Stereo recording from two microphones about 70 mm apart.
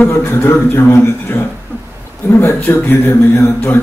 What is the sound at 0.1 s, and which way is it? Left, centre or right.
A man's voice, left.